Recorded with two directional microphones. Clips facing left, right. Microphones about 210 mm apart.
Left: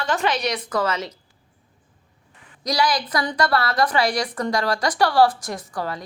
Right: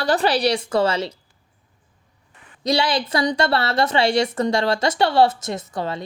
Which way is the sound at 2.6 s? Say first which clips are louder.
Right 2 dB; 25° right (ahead or behind).